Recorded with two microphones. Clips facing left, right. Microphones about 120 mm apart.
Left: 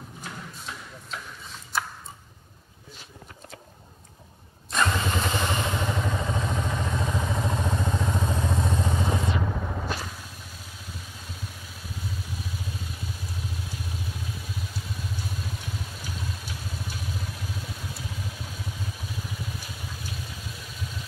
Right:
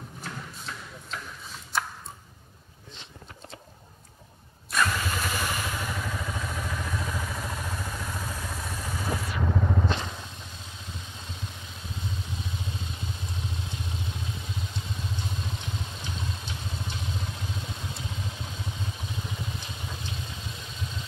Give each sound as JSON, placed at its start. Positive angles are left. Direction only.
{"t": 0.4, "sound": "a sound", "side_deg": 0}
{"t": 4.6, "sound": "vehicle", "side_deg": 25}
{"t": 9.6, "sound": "vehicle", "side_deg": 5}
{"t": 17.6, "sound": "vehicle", "side_deg": -25}
{"t": 17.9, "sound": "vehicle", "side_deg": 5}